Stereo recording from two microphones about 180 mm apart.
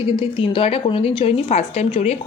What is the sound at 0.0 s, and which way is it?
A woman's voice, 30° left (ahead or behind).